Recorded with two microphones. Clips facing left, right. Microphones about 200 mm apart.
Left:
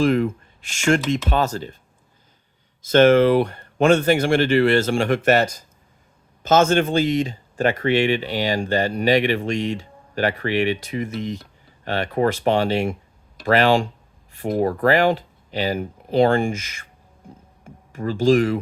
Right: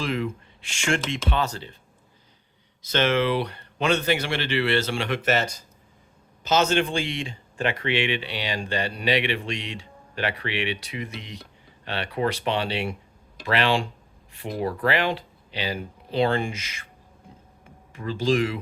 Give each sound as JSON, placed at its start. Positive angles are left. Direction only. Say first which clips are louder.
{"t": 0.0, "sound": "speech", "louder": "left 9 dB", "side_deg": 45}
{"t": 2.8, "sound": "speech", "louder": "left 9 dB", "side_deg": 50}
{"t": 6.4, "sound": "speech", "louder": "left 5 dB", "side_deg": 50}